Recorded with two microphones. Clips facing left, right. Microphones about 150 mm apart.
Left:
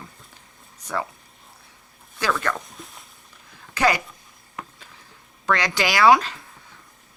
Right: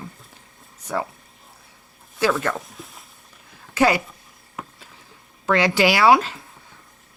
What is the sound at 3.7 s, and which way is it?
Speech, 10° right (ahead or behind).